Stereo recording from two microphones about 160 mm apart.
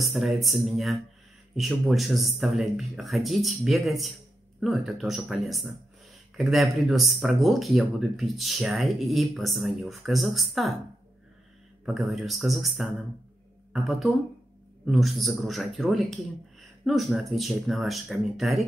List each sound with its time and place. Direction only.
0.0 s speech: centre (ahead or behind)
11.8 s speech: centre (ahead or behind)